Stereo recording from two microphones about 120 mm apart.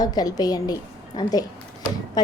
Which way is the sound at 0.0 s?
35° left (ahead or behind).